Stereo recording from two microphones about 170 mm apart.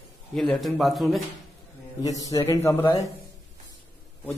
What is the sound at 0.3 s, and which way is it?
Speech, centre (ahead or behind).